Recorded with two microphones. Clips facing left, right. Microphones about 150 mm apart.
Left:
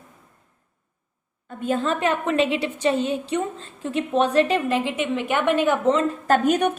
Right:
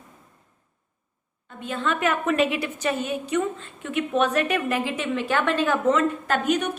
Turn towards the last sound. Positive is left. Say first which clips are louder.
# left 4 dB
turn(degrees=50)  # may be behind; listen again after turning